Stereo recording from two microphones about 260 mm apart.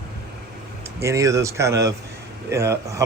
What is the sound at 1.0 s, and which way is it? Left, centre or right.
Speech, centre.